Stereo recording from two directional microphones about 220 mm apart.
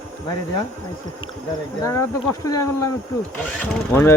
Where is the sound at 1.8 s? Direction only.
15° left (ahead or behind).